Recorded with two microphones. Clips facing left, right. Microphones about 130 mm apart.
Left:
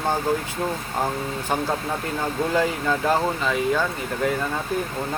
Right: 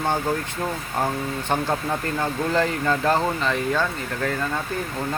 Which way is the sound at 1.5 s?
5° left (ahead or behind).